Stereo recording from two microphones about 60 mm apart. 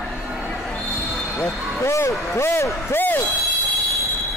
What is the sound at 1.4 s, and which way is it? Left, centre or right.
Speech, left.